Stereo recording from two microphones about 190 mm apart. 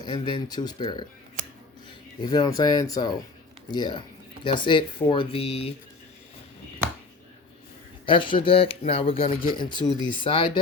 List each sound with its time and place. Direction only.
0.0 s speech: 25° left (ahead or behind)
2.2 s speech: 20° left (ahead or behind)
8.0 s speech: 25° left (ahead or behind)